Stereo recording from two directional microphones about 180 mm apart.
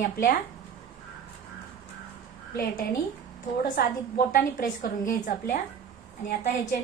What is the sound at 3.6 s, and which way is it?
A woman's voice, 55° left (ahead or behind).